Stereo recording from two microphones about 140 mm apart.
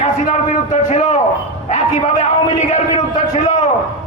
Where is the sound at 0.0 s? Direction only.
55° left (ahead or behind).